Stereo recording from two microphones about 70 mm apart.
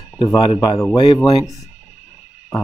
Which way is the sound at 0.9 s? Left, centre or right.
Left.